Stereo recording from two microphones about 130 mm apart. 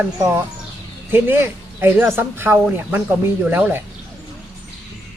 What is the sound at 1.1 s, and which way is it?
Speech, 15° right (ahead or behind).